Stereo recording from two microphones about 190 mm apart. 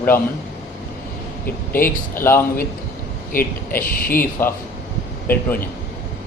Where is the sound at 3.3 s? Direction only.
50° left (ahead or behind).